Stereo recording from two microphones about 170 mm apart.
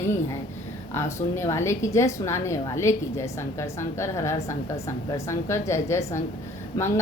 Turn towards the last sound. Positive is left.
turn(degrees=15)  # may be behind; listen again after turning